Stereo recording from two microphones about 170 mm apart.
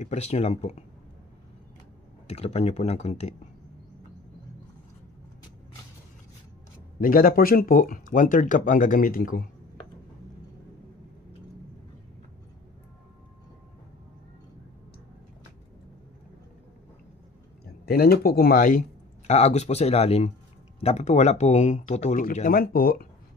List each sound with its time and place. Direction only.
0.0 s speech: 40° left (ahead or behind)
2.2 s speech: 35° left (ahead or behind)
7.0 s speech: 55° left (ahead or behind)
17.8 s speech: 65° left (ahead or behind)